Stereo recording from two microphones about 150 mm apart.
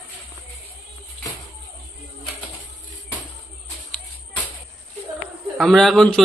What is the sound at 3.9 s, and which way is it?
Music, 10° left (ahead or behind).